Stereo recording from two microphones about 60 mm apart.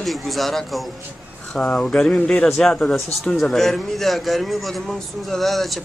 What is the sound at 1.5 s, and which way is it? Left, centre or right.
Speech, centre.